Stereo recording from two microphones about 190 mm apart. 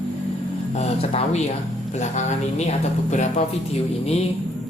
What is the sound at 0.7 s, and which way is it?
A woman's voice, 35° left (ahead or behind).